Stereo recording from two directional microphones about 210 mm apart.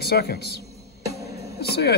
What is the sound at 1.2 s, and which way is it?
Music, 50° left (ahead or behind).